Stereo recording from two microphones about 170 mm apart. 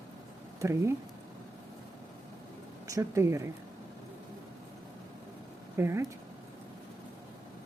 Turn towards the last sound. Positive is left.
turn(degrees=-15)  # may be behind; listen again after turning